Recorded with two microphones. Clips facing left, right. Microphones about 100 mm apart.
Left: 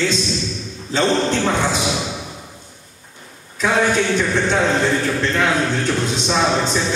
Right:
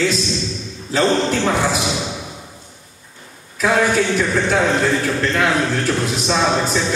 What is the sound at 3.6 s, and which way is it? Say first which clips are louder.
A man's voice: right 1 dB; 5° right (ahead or behind).